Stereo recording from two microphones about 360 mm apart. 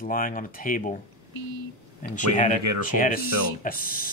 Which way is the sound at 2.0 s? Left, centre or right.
Left.